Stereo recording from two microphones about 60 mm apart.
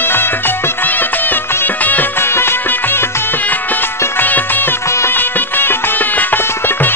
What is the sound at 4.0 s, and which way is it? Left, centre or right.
Music, left.